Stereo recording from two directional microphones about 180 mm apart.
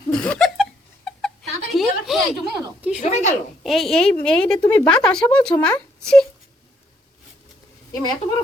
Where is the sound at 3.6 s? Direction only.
Centre (ahead or behind).